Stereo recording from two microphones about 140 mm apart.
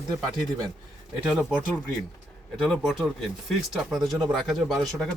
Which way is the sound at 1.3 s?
5° right (ahead or behind).